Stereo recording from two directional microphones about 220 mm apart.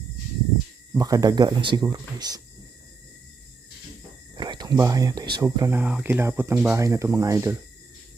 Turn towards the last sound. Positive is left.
turn(degrees=-15)  # may be behind; listen again after turning